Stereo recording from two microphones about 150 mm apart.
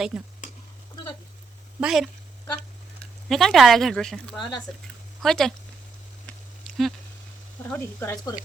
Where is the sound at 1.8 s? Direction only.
5° right (ahead or behind).